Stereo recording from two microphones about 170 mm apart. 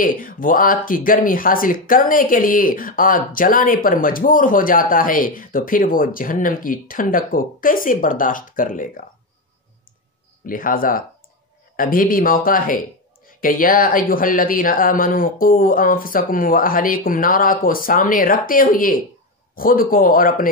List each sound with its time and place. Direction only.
0.0 s speech: 55° left (ahead or behind)
10.4 s speech: 55° left (ahead or behind)